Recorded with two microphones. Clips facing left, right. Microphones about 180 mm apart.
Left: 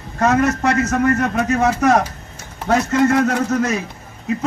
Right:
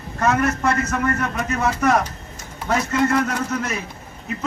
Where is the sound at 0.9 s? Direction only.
50° left (ahead or behind).